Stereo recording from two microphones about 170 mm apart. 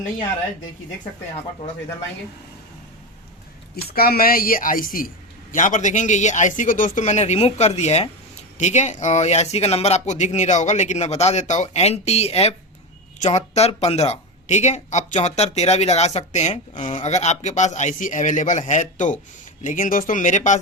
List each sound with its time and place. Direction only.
3.8 s a woman's voice: 65° left (ahead or behind); by 20.6 s 45° left (ahead or behind)